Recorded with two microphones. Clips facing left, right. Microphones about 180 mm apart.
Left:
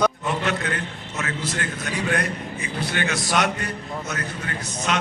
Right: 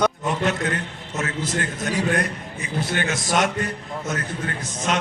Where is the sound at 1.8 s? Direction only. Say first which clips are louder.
Right 2 dB; 45° right (ahead or behind).